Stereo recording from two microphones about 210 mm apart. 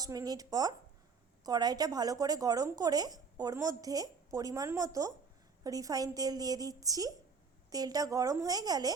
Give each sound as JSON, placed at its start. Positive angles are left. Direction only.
{"t": 0.0, "sound": "a woman's voice", "side_deg": -15}